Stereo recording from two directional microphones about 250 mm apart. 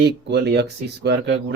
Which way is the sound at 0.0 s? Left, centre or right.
Right.